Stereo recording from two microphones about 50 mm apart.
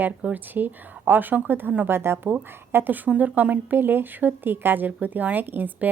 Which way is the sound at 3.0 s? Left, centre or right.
Right.